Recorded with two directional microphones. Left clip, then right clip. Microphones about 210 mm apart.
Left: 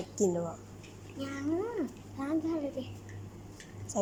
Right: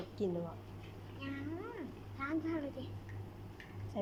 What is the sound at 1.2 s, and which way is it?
Speech, 60° left (ahead or behind).